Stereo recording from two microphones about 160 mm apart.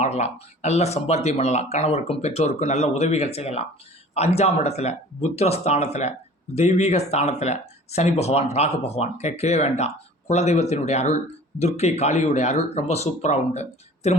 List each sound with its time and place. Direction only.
0.0 s speech: 40° left (ahead or behind)